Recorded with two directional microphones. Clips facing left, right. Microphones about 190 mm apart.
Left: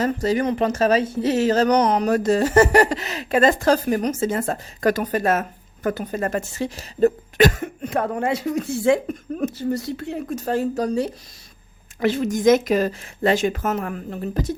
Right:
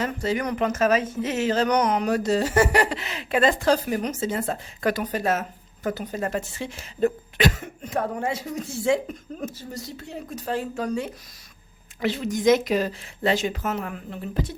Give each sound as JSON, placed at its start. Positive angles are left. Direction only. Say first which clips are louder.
{"t": 0.0, "sound": "speech", "louder": "left 5 dB", "side_deg": 40}
{"t": 11.9, "sound": "speech", "louder": "left 5 dB", "side_deg": 50}